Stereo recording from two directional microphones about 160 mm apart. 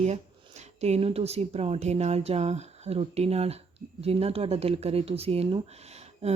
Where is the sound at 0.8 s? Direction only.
40° right (ahead or behind).